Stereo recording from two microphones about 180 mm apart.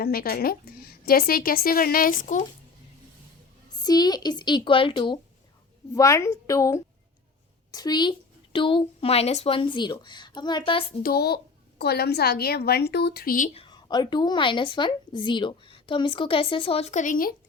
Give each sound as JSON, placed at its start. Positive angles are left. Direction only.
{"t": 0.0, "sound": "a woman's voice", "side_deg": 55}
{"t": 3.8, "sound": "a woman's voice", "side_deg": 20}
{"t": 11.0, "sound": "a woman's voice", "side_deg": 60}
{"t": 13.5, "sound": "a woman's voice", "side_deg": 30}